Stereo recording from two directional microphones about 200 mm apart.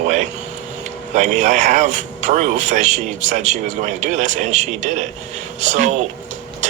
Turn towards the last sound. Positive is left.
turn(degrees=-35)  # may be behind; listen again after turning